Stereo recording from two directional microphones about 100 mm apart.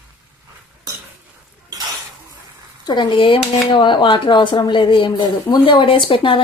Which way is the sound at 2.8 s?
50° left (ahead or behind).